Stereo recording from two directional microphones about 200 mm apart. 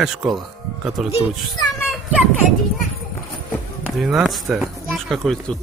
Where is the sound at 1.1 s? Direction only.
20° left (ahead or behind).